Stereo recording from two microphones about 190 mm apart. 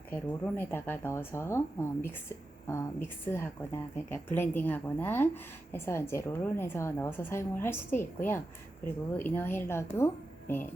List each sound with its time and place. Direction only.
0.1 s a woman's voice: 10° left (ahead or behind)